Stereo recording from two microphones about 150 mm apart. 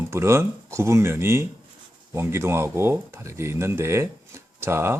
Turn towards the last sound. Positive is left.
turn(degrees=-15)  # may be behind; listen again after turning